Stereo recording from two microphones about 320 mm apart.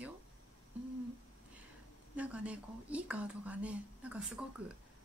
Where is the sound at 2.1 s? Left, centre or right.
Centre.